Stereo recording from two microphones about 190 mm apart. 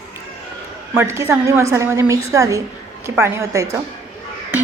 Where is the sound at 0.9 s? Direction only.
15° right (ahead or behind).